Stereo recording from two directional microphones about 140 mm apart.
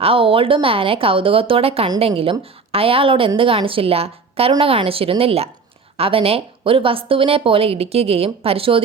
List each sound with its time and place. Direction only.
0.0 s a woman's voice: 40° right (ahead or behind)